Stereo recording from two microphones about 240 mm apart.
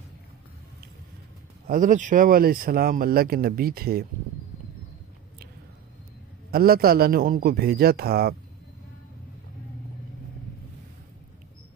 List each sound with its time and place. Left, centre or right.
1.7 s speech: right
6.5 s speech: right